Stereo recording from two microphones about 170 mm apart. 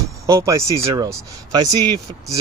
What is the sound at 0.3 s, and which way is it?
Speech, 15° right (ahead or behind).